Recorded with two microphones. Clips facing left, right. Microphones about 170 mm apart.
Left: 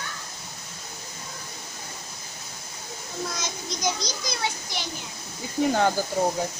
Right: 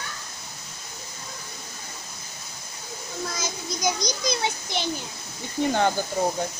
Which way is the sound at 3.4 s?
10° right (ahead or behind).